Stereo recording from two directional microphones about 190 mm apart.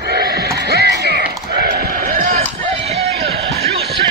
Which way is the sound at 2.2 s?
45° right (ahead or behind).